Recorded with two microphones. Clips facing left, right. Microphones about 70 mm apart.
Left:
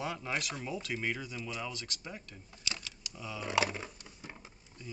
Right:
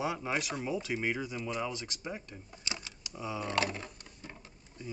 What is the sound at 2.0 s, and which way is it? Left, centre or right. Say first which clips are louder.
Speech: right 5 dB; right.